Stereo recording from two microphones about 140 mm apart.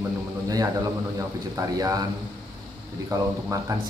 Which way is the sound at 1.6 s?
25° right (ahead or behind).